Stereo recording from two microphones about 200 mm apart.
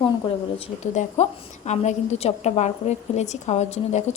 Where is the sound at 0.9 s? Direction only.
35° left (ahead or behind).